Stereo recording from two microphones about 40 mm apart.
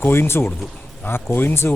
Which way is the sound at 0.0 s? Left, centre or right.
Left.